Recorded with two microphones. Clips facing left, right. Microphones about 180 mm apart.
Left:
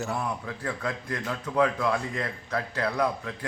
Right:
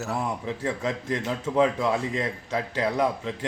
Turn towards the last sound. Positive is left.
turn(degrees=-20)  # may be behind; listen again after turning